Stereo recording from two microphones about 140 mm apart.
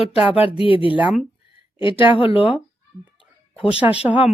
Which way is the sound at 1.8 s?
35° left (ahead or behind).